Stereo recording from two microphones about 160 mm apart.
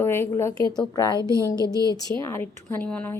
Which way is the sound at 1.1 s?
20° right (ahead or behind).